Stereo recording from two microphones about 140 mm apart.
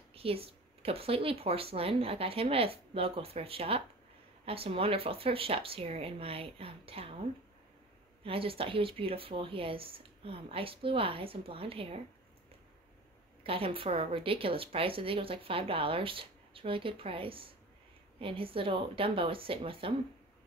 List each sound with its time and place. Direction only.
0.1 s speech: 45° right (ahead or behind)
8.2 s a woman's voice: 40° right (ahead or behind)
13.4 s a woman's voice: 40° right (ahead or behind)